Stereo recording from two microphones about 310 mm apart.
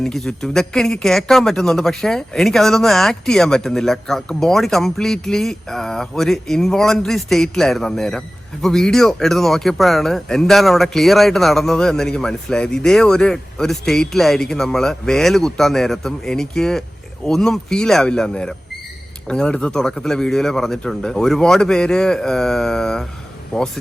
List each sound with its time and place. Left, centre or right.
0.0 s speech: centre